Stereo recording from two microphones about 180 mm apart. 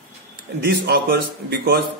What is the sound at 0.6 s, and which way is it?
A man's voice, 60° right (ahead or behind).